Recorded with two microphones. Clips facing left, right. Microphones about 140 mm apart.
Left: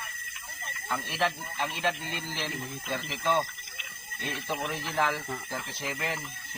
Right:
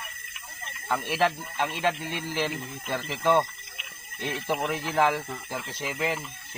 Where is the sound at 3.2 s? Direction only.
40° right (ahead or behind).